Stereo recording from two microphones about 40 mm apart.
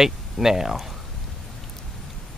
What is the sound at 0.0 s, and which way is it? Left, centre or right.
Speech, centre.